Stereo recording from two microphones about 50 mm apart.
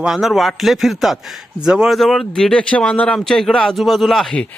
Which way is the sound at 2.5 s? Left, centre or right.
Centre.